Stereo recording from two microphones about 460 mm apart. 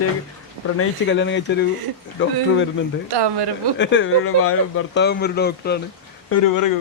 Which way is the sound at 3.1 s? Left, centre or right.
Right.